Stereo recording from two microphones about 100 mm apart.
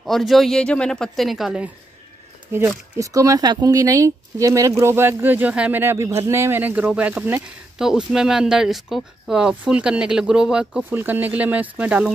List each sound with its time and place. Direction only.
0.0 s speech: centre (ahead or behind)
2.5 s speech: 25° right (ahead or behind)
5.8 s speech: 25° right (ahead or behind)
7.8 s speech: 5° right (ahead or behind)
10.9 s speech: 20° right (ahead or behind)